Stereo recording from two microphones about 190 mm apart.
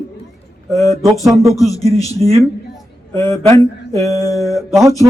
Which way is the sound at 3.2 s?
15° left (ahead or behind).